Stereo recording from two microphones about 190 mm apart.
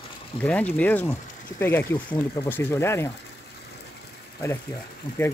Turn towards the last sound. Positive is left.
turn(degrees=25)  # may be behind; listen again after turning